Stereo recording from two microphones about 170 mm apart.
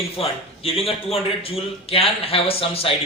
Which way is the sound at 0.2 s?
35° left (ahead or behind).